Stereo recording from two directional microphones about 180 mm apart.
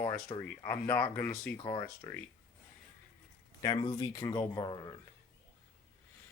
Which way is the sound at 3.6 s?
25° left (ahead or behind).